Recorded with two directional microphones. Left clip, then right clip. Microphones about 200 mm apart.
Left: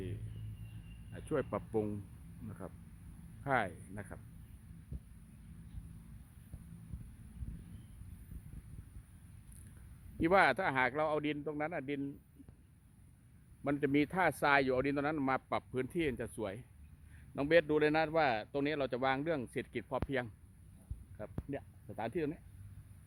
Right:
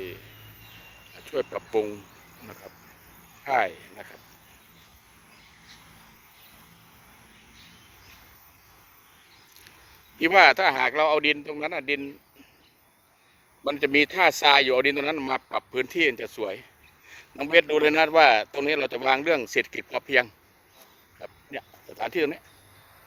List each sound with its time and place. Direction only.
1.3 s speech: centre (ahead or behind)
3.4 s speech: centre (ahead or behind)
10.2 s speech: centre (ahead or behind)
13.7 s speech: centre (ahead or behind)
22.0 s speech: 15° right (ahead or behind)